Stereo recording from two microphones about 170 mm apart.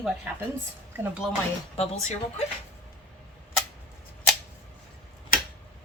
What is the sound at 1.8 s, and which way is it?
Speech, 40° left (ahead or behind).